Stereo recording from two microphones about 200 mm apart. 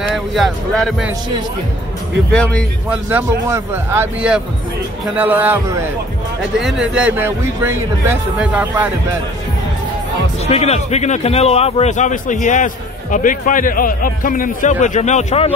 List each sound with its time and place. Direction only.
0.0 s speech: centre (ahead or behind)
2.3 s a man's voice: 5° left (ahead or behind)
2.9 s a man's voice: 10° right (ahead or behind)
10.4 s a man's voice: 30° left (ahead or behind)